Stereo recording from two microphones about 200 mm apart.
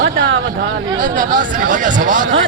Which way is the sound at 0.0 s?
65° right (ahead or behind).